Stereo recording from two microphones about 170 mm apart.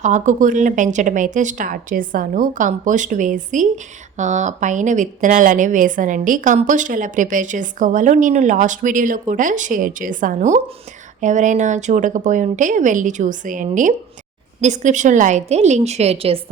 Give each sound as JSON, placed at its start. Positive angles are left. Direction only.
{"t": 0.0, "sound": "speech", "side_deg": -45}